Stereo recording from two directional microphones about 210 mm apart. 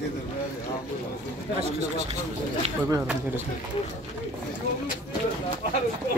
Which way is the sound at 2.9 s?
10° right (ahead or behind).